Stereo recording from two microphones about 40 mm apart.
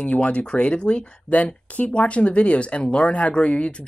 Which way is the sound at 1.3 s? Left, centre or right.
Left.